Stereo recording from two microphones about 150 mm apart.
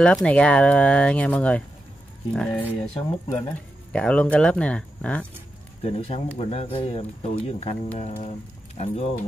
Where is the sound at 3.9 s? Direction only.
5° left (ahead or behind).